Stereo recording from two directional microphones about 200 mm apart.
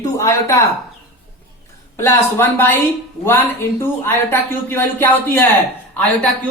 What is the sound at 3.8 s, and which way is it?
Speech, 10° left (ahead or behind).